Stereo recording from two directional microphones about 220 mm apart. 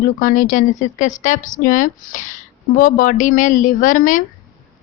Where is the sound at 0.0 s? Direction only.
35° left (ahead or behind).